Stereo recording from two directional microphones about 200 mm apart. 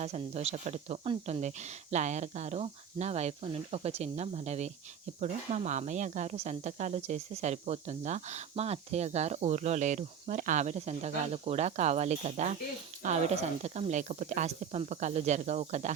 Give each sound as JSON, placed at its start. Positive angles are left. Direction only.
{"t": 0.0, "sound": "speech", "side_deg": -35}